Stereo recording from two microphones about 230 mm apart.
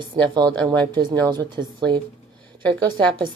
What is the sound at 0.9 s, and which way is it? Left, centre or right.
A woman's voice, centre.